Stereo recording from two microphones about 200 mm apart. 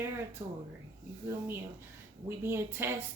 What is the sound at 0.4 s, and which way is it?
Speech, 20° right (ahead or behind).